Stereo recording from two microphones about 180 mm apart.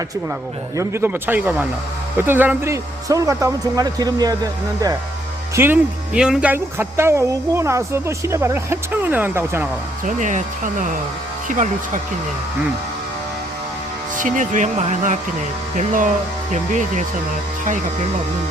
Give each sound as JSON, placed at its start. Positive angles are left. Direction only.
{"t": 0.8, "sound": "speech", "side_deg": -15}
{"t": 5.5, "sound": "speech", "side_deg": -10}
{"t": 10.1, "sound": "speech", "side_deg": -45}
{"t": 14.2, "sound": "speech", "side_deg": -45}